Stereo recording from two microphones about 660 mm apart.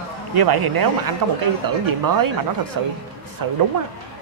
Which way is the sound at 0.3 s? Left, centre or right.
Right.